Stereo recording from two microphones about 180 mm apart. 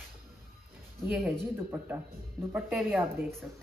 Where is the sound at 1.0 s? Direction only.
Centre (ahead or behind).